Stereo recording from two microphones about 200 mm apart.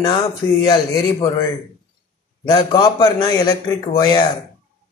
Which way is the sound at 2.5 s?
20° left (ahead or behind).